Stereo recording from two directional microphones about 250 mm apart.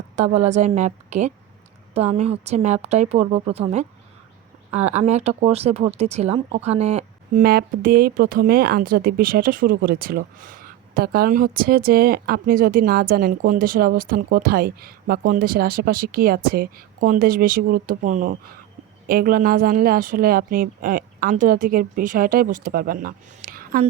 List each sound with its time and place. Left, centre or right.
0.2 s a woman's voice: right